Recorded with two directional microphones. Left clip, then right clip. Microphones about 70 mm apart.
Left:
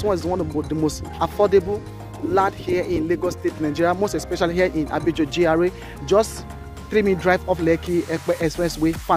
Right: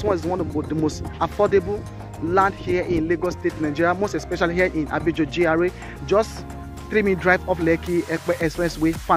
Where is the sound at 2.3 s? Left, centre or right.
Left.